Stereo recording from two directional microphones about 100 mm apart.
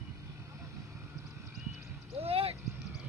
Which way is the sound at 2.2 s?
80° right.